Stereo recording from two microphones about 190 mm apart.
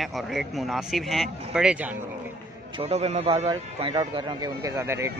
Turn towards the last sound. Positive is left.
turn(degrees=-15)  # may be behind; listen again after turning